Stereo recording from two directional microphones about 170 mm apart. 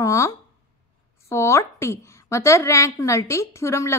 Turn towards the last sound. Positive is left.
turn(degrees=15)  # may be behind; listen again after turning